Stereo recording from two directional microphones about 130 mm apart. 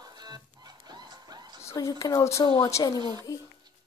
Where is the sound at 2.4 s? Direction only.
35° left (ahead or behind).